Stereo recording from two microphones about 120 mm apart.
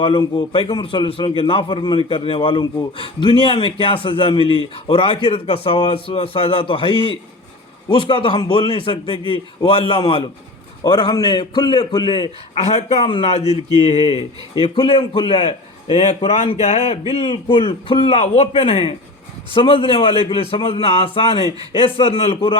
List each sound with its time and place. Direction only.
0.0 s a man's voice: 45° left (ahead or behind)
10.8 s a man's voice: 35° left (ahead or behind)
12.6 s a man's voice: 55° left (ahead or behind)